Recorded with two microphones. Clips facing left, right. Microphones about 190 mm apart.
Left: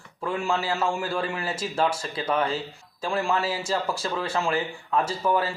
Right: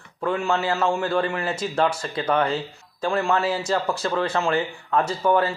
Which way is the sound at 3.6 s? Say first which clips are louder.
Right 4 dB; 5° left (ahead or behind).